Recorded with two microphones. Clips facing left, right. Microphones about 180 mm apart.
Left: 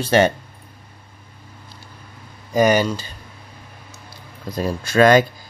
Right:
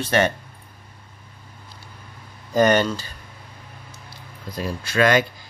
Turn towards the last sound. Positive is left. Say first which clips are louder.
# left 5 dB
turn(degrees=40)  # may be behind; listen again after turning